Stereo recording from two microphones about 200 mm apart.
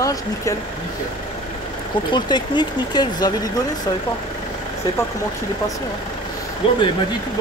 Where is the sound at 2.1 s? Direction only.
20° left (ahead or behind).